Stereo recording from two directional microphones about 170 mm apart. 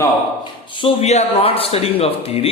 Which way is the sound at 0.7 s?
35° left (ahead or behind).